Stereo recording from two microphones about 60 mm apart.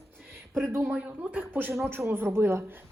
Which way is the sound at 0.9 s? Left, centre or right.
Right.